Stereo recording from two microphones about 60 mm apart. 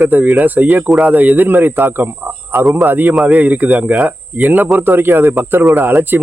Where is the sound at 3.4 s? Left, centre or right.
Right.